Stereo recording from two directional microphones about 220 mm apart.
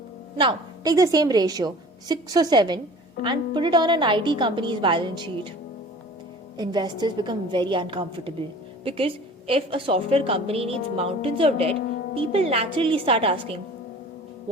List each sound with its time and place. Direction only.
0.3 s a woman's voice: 20° right (ahead or behind)
6.6 s a woman's voice: 20° right (ahead or behind)